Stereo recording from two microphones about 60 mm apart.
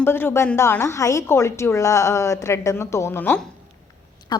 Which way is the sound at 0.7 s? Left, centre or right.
Left.